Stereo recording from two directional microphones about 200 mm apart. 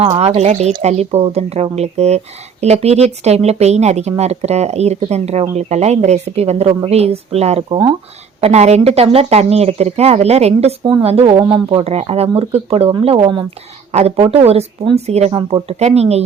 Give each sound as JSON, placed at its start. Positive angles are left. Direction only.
{"t": 0.2, "sound": "speech", "side_deg": -30}